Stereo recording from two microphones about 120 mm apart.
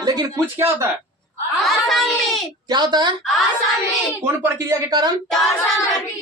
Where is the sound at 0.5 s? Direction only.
20° right (ahead or behind).